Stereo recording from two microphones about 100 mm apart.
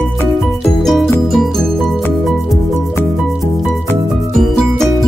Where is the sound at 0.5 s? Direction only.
Centre (ahead or behind).